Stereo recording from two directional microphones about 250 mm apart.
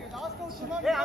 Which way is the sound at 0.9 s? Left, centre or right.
Centre.